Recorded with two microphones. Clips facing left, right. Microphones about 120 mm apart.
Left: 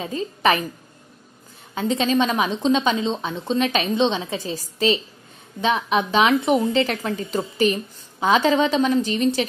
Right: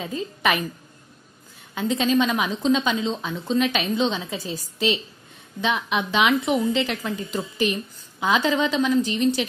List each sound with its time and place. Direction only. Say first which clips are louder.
0.0 s a woman's voice: left 3 dB; 30° left (ahead or behind)
1.8 s a woman's voice: left 1 dB; 30° left (ahead or behind)
4.3 s a woman's voice: left 3 dB; centre (ahead or behind)
4.7 s a woman's voice: left 3 dB; 40° left (ahead or behind)